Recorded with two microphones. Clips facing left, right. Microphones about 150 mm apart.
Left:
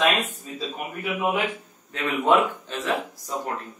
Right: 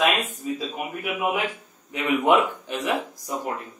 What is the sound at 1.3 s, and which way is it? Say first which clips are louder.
A man's voice: left 1 dB; 15° right (ahead or behind).